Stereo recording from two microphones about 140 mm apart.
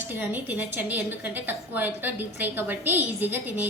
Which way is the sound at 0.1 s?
15° right (ahead or behind).